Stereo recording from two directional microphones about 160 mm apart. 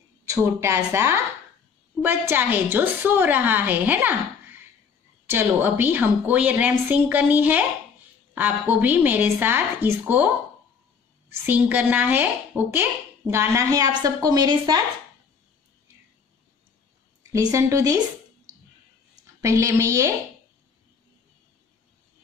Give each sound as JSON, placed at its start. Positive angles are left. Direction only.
{"t": 0.2, "sound": "a woman's voice", "side_deg": -20}
{"t": 11.4, "sound": "a woman's voice", "side_deg": -10}
{"t": 17.3, "sound": "speech", "side_deg": -20}
{"t": 19.4, "sound": "a woman's voice", "side_deg": -20}